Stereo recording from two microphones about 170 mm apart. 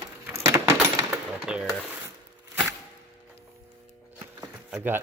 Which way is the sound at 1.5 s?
5° right (ahead or behind).